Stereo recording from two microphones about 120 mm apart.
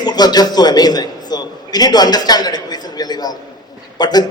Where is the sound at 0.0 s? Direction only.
35° left (ahead or behind).